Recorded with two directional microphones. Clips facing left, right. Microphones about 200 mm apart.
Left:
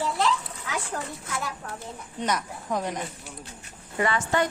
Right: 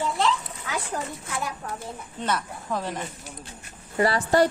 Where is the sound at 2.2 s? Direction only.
15° left (ahead or behind).